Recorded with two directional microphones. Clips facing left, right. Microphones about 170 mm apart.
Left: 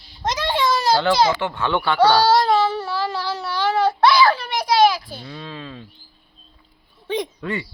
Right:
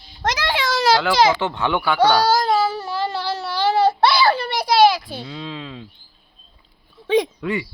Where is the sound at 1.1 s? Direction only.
90° right.